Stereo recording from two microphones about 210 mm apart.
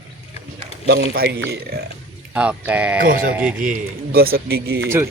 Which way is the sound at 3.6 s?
45° right (ahead or behind).